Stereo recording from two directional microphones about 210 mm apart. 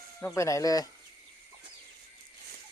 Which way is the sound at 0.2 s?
15° left (ahead or behind).